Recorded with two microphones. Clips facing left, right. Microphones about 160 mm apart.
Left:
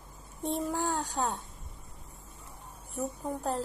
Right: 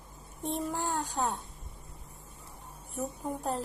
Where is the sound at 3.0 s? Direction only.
Centre (ahead or behind).